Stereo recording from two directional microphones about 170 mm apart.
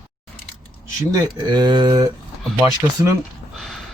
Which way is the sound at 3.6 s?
Centre (ahead or behind).